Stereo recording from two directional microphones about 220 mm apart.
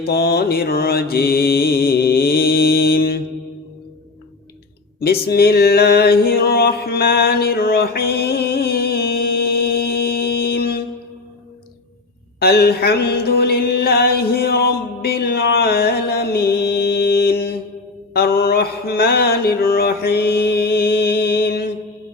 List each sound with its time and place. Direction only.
0.0 s mantra: 45° left (ahead or behind)
4.9 s a sound: 45° left (ahead or behind)
12.4 s music: 45° left (ahead or behind)
18.1 s mantra: 45° left (ahead or behind)